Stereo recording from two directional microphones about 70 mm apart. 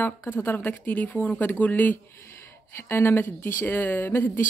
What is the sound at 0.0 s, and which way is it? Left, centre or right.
Speech, left.